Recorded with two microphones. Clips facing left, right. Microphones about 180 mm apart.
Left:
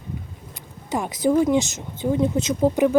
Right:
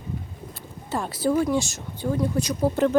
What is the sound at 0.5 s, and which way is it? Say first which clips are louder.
Speech: left 3 dB; 15° left (ahead or behind).